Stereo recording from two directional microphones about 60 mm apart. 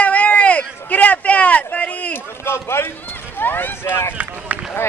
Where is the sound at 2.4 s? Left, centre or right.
Left.